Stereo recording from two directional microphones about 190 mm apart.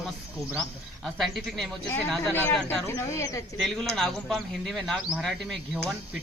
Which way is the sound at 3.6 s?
Centre (ahead or behind).